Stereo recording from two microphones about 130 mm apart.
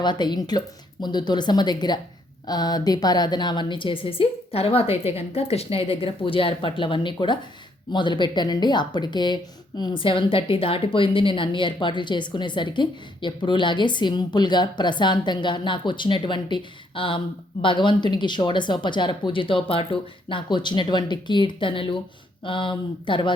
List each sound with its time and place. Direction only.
0.0 s a woman's voice: 35° left (ahead or behind)